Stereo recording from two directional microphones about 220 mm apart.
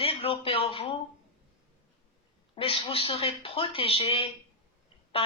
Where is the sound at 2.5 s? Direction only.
25° left (ahead or behind).